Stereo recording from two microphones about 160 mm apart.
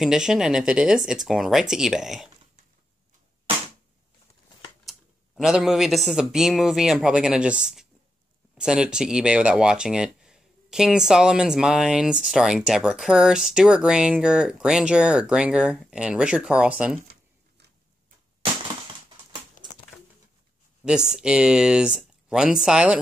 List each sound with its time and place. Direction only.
0.0 s speech: 5° right (ahead or behind)
4.8 s speech: centre (ahead or behind)
19.6 s a sound: 55° left (ahead or behind)
20.8 s speech: 5° right (ahead or behind)